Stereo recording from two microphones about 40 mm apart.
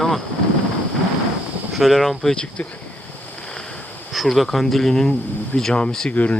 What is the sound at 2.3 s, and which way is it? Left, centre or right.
Speech, left.